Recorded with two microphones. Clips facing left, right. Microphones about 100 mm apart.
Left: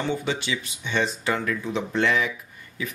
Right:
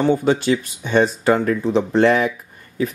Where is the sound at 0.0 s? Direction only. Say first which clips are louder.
Right 10 dB; 40° right (ahead or behind).